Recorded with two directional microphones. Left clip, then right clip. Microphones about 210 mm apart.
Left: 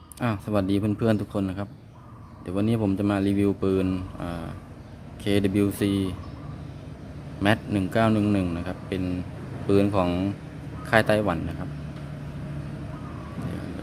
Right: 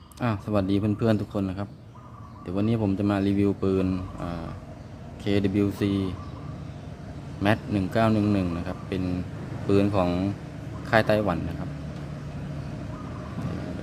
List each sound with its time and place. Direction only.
0.2 s speech: 10° left (ahead or behind)
7.4 s speech: 10° left (ahead or behind)